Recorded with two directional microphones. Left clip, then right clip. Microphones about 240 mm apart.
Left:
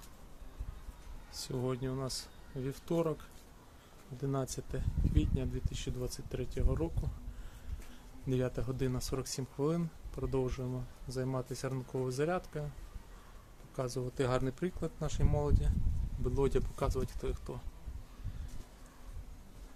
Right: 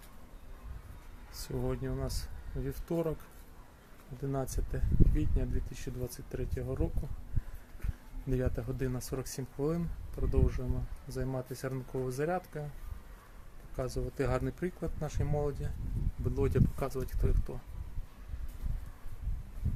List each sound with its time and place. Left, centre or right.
1.3 s speech: centre
4.2 s speech: centre
8.3 s speech: centre
13.7 s speech: centre